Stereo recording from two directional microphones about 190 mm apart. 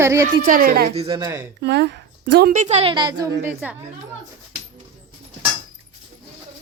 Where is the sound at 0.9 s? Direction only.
30° right (ahead or behind).